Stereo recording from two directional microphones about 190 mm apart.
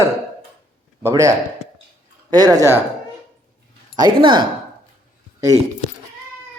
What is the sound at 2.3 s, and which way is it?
Speech, 20° right (ahead or behind).